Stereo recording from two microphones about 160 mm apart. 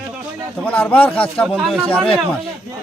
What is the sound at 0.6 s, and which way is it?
A man's voice, 10° left (ahead or behind).